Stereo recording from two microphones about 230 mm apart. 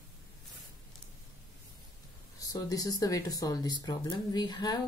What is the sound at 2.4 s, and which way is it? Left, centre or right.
Speech, centre.